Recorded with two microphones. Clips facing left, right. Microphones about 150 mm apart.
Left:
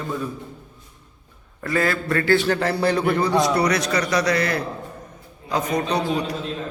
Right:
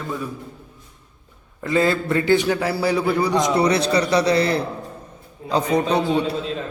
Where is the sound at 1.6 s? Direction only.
20° right (ahead or behind).